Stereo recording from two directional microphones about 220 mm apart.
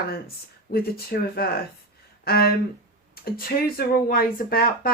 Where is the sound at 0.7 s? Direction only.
45° left (ahead or behind).